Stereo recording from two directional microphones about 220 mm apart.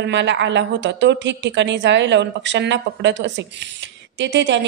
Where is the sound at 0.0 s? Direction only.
55° right (ahead or behind).